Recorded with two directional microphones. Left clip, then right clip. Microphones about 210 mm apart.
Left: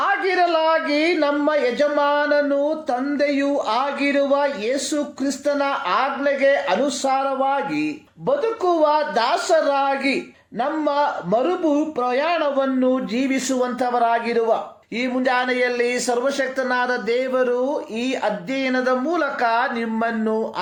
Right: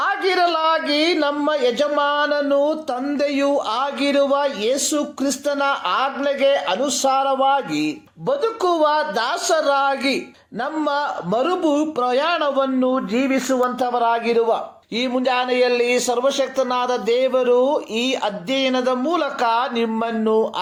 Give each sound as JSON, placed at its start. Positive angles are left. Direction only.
{"t": 0.0, "sound": "a woman's voice", "side_deg": -30}